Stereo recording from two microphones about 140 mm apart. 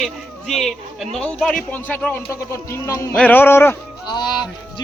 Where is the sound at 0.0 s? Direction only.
Centre (ahead or behind).